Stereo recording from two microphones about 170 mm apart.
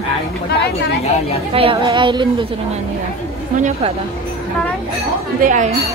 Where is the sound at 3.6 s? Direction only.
35° right (ahead or behind).